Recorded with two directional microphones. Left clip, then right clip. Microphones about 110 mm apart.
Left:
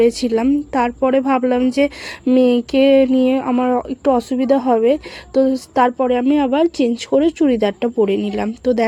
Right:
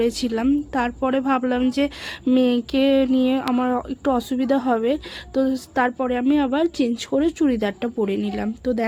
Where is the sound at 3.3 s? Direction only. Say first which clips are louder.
Left 5 dB; 20° left (ahead or behind).